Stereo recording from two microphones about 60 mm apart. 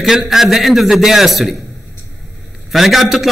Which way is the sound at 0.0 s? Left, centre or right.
Centre.